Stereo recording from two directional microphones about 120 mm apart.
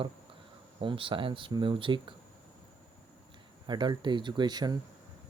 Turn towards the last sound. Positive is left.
turn(degrees=-35)  # may be behind; listen again after turning